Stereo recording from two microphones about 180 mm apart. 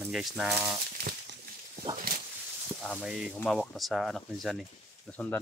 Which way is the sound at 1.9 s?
55° right (ahead or behind).